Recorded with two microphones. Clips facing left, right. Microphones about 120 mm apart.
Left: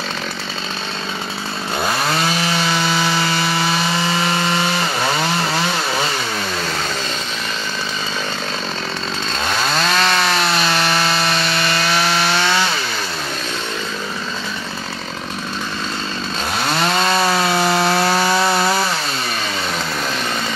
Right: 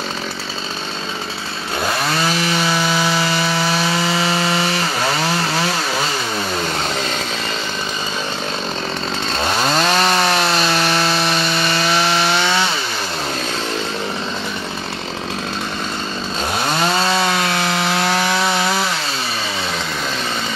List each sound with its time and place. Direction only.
9.6 s chainsaw: 20° right (ahead or behind)
10.9 s sawing: centre (ahead or behind)
11.9 s wood: 15° right (ahead or behind)
17.1 s chainsaw: centre (ahead or behind)